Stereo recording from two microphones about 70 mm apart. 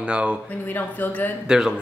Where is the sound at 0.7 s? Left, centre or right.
Left.